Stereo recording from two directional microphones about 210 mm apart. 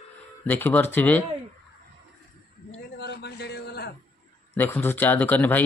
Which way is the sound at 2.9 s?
55° left (ahead or behind).